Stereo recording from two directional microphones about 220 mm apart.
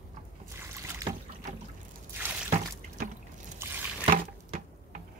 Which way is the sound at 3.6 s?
10° right (ahead or behind).